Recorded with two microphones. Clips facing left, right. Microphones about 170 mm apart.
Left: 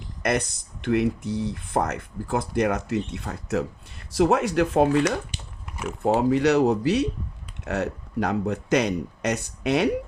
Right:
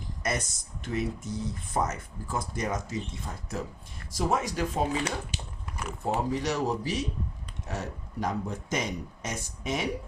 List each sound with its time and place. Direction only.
0.2 s speech: 60° left (ahead or behind)